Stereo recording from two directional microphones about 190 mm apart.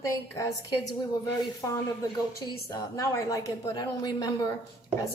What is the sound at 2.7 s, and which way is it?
A woman's voice, 15° left (ahead or behind).